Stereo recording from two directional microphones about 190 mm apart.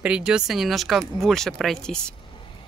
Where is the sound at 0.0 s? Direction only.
5° right (ahead or behind).